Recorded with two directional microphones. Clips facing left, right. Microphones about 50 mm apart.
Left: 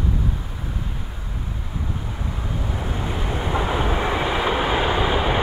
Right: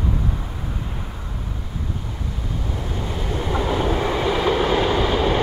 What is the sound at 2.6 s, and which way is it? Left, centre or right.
Vehicle, centre.